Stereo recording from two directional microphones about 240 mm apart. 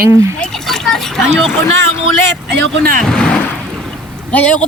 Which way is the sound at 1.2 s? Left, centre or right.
Centre.